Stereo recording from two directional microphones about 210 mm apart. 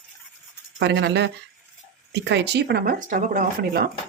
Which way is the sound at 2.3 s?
55° right (ahead or behind).